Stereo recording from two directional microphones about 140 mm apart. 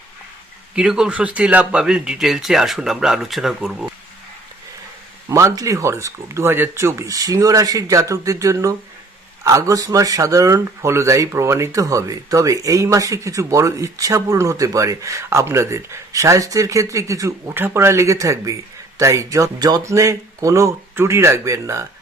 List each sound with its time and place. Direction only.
0.8 s a man's voice: 5° right (ahead or behind)
5.3 s speech: 20° right (ahead or behind)